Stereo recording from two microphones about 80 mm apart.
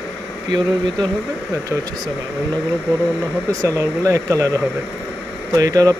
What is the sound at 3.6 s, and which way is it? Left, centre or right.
Speech, right.